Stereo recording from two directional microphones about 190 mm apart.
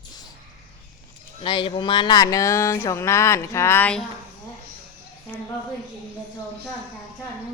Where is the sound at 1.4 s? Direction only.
30° left (ahead or behind); by 4.0 s 10° left (ahead or behind).